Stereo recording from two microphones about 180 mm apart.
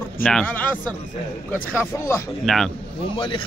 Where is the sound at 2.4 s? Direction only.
Centre (ahead or behind).